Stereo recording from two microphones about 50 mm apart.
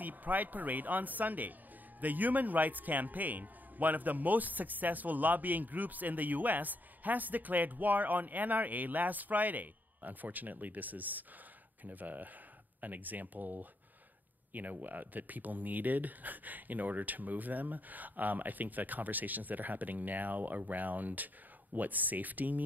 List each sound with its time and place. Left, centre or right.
0.0 s a man's voice: right